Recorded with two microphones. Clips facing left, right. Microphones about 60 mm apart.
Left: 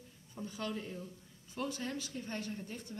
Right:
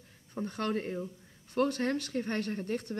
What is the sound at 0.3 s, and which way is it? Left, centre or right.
Speech, right.